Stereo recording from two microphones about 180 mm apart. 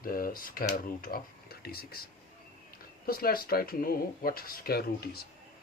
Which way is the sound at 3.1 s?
55° left (ahead or behind).